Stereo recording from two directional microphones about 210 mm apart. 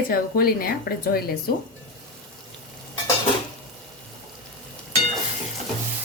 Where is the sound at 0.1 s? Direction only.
45° left (ahead or behind).